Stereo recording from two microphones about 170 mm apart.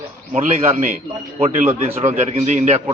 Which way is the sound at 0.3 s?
45° right (ahead or behind).